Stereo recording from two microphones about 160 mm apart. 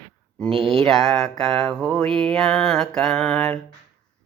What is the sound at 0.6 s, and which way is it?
Mantra, centre (ahead or behind).